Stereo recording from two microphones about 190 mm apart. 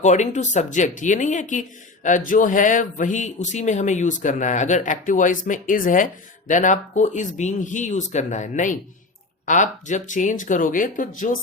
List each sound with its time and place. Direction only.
0.0 s speech: 40° left (ahead or behind)